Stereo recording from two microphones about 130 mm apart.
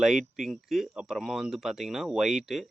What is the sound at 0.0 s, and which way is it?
Speech, 5° right (ahead or behind).